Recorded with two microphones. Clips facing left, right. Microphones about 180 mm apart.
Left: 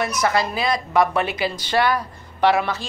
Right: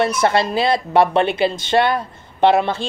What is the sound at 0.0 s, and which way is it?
A woman's voice, 30° right (ahead or behind).